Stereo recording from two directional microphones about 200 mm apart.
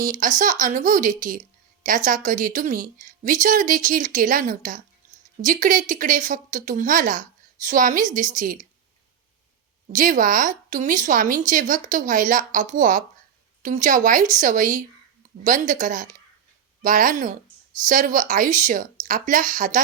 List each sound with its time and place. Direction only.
0.1 s speech: 40° right (ahead or behind)
9.9 s speech: 40° right (ahead or behind)